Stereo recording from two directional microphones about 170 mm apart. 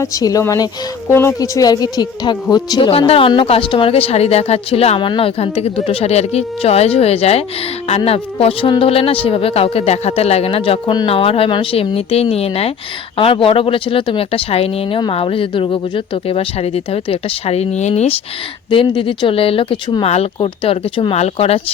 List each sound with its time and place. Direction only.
0.0 s speech: 20° left (ahead or behind); by 21.6 s 35° left (ahead or behind)